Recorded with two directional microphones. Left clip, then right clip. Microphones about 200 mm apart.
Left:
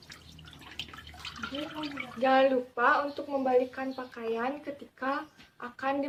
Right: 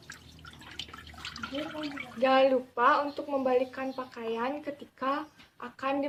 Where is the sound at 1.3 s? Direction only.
Centre (ahead or behind).